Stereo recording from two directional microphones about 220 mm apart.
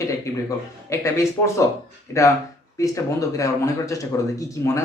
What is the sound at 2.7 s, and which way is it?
Speech, 15° left (ahead or behind).